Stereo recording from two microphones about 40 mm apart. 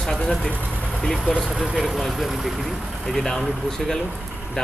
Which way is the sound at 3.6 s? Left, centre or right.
Centre.